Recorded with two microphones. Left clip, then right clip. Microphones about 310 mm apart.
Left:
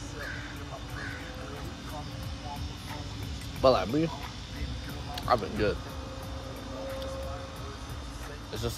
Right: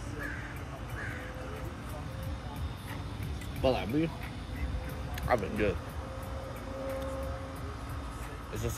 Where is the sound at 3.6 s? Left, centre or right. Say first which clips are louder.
Left 6 dB; centre.